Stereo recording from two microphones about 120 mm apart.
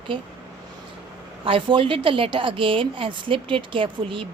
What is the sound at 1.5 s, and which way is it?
A woman's voice, 45° right (ahead or behind).